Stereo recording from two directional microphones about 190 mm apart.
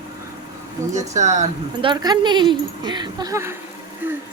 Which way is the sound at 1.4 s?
25° right (ahead or behind).